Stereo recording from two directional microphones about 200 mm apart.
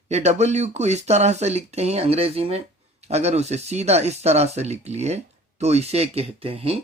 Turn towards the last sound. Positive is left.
turn(degrees=-30)  # may be behind; listen again after turning